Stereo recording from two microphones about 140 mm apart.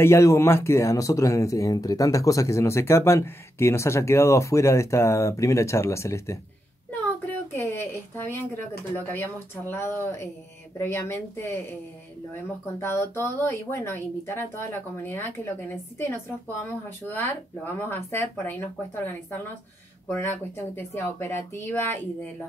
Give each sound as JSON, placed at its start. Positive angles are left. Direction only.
{"t": 0.0, "sound": "speech", "side_deg": 20}
{"t": 7.2, "sound": "a sound", "side_deg": 15}
{"t": 8.9, "sound": "speech", "side_deg": 15}
{"t": 12.8, "sound": "speech", "side_deg": 15}
{"t": 20.1, "sound": "speech", "side_deg": 15}